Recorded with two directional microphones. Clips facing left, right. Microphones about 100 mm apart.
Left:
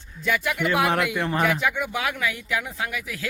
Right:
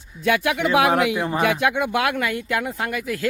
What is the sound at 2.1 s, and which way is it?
Speech, 50° right (ahead or behind).